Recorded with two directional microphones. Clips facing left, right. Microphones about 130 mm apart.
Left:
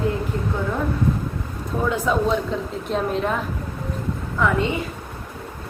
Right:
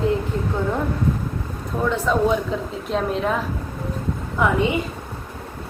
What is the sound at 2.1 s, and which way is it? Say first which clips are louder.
A woman's voice: right 2 dB; 5° left (ahead or behind).